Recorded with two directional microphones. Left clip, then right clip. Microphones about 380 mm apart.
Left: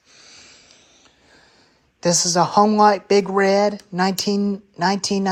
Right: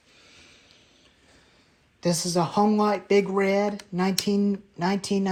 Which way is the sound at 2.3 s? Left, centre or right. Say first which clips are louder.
Left 7 dB; centre.